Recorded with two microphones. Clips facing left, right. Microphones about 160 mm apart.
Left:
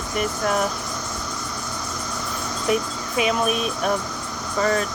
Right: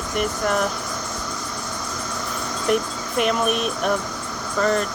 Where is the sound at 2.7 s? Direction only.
Centre (ahead or behind).